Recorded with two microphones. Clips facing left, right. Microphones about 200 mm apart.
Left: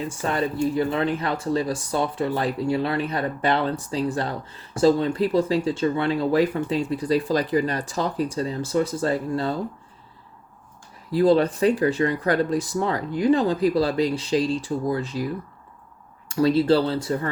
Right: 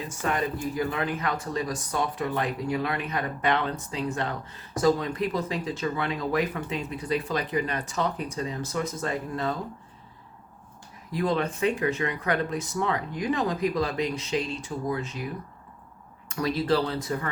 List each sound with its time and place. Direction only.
0.2 s speech: 30° left (ahead or behind)
11.1 s speech: 30° left (ahead or behind)
16.3 s speech: 30° left (ahead or behind)